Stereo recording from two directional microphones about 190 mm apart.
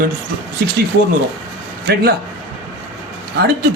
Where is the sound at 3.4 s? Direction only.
55° right (ahead or behind).